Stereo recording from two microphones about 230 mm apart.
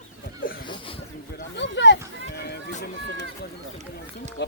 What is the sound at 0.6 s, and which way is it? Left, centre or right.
Speech, centre.